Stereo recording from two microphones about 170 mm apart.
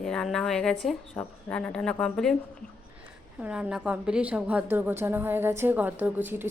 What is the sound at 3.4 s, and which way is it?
A woman's voice, 5° right (ahead or behind).